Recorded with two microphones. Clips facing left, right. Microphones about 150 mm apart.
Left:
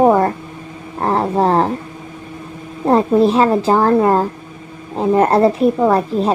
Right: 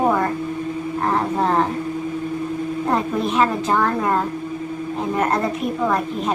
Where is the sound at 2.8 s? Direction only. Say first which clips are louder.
Left 11 dB; 30° left (ahead or behind).